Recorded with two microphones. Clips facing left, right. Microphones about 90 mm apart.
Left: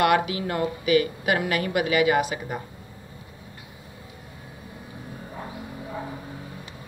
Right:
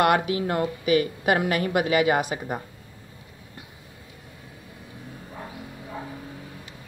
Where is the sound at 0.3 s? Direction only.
35° right (ahead or behind).